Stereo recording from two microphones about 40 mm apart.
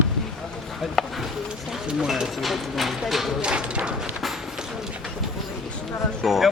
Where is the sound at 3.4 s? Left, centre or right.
Right.